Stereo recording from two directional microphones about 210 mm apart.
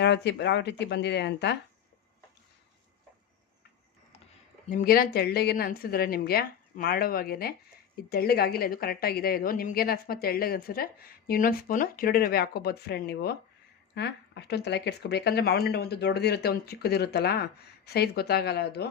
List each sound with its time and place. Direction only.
0.0 s speech: 55° left (ahead or behind)
4.7 s a woman's voice: 45° left (ahead or behind)